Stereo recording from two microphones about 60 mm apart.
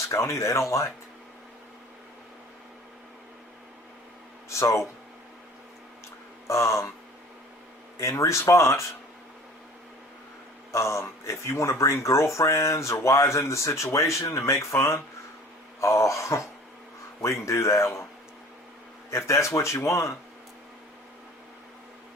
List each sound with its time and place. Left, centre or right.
0.3 s speech: left
4.4 s speech: left
6.5 s speech: left
7.9 s speech: left
10.7 s speech: left
19.1 s speech: left